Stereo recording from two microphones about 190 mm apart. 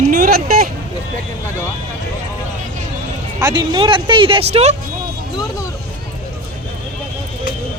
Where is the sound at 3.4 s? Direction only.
25° right (ahead or behind).